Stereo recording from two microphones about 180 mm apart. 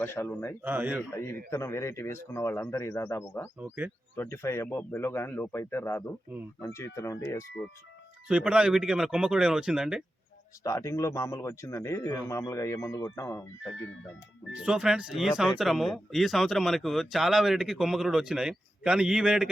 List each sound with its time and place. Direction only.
0.0 s speech: 15° left (ahead or behind)
0.6 s a man's voice: 10° right (ahead or behind)
1.1 s speech: 15° left (ahead or behind)
3.6 s a man's voice: 10° right (ahead or behind)
4.1 s speech: 15° left (ahead or behind)
8.3 s speech: 5° right (ahead or behind)
10.6 s speech: 15° left (ahead or behind)
14.5 s speech: 5° right (ahead or behind)